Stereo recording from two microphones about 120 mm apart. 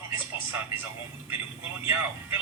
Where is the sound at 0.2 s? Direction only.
15° right (ahead or behind).